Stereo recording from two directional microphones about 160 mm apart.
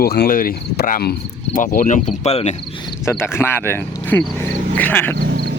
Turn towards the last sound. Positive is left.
turn(degrees=-70)  # may be behind; listen again after turning